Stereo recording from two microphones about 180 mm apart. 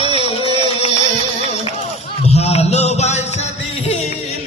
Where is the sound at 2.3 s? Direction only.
35° left (ahead or behind).